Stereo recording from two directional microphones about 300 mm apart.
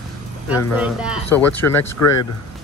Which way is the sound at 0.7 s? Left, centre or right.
Centre.